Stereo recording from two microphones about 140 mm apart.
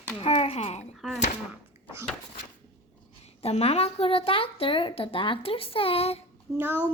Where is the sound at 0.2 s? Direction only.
40° left (ahead or behind).